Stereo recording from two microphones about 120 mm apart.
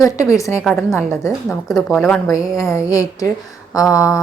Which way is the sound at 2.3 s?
25° left (ahead or behind).